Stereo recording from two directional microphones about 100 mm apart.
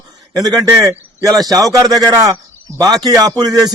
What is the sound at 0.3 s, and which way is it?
A man's voice, 40° right (ahead or behind).